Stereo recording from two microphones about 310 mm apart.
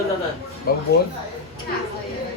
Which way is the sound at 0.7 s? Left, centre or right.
Left.